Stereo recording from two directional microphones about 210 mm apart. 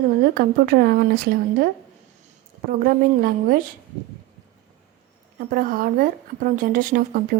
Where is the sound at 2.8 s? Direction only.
45° right (ahead or behind).